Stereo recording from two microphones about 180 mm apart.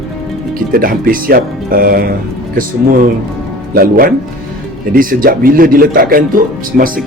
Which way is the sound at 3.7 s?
55° right (ahead or behind).